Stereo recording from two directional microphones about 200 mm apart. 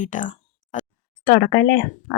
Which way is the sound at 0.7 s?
40° left (ahead or behind).